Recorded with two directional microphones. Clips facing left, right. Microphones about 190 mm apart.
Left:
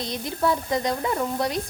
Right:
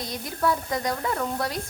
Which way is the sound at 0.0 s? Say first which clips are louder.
Left 2 dB; 25° left (ahead or behind).